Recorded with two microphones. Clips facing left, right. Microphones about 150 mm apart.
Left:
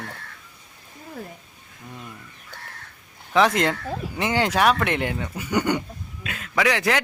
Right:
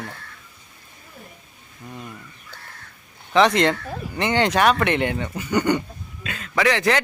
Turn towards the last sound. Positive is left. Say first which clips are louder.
# right 2 dB
turn(degrees=5)  # may be behind; listen again after turning